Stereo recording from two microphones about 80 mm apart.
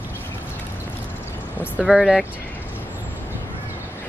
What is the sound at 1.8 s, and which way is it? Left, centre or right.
Speech, centre.